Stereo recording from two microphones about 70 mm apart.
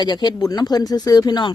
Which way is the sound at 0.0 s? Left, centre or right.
Left.